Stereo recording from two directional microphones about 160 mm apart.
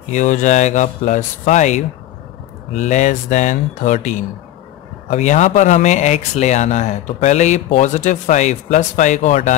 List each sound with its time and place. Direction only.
0.1 s speech: 50° left (ahead or behind)